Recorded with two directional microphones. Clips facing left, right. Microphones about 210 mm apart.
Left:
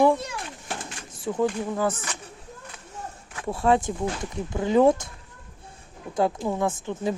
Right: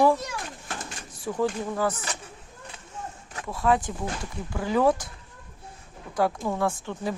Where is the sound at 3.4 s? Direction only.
30° left (ahead or behind).